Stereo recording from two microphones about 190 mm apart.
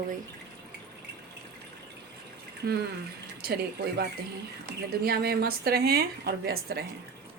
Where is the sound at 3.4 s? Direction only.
55° right (ahead or behind).